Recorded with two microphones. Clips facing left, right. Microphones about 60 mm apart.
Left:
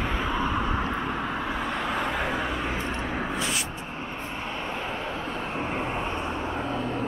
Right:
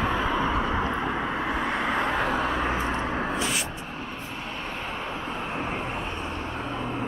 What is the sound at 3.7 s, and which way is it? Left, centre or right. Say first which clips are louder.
Vehicle: left 1 dB; left.